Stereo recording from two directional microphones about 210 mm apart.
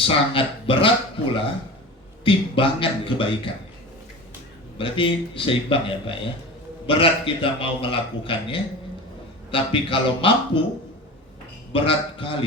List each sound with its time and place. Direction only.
0.0 s a man's voice: 25° left (ahead or behind)
2.2 s a man's voice: 25° left (ahead or behind)
4.8 s a man's voice: 25° left (ahead or behind)
11.7 s a man's voice: 25° left (ahead or behind)